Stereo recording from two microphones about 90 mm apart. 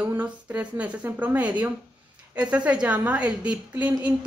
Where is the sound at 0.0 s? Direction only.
20° right (ahead or behind).